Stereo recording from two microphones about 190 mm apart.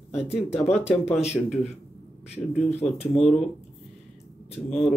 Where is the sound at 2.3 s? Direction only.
35° left (ahead or behind).